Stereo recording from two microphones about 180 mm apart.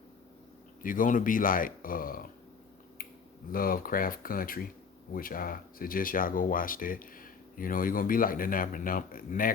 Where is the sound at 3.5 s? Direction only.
50° left (ahead or behind).